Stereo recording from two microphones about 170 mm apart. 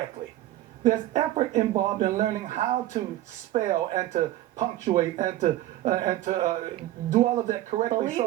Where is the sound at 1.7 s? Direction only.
50° right (ahead or behind).